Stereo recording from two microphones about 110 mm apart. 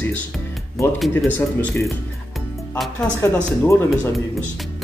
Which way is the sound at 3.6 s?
20° left (ahead or behind).